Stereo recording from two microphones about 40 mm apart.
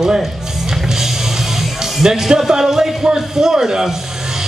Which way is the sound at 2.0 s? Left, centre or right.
Centre.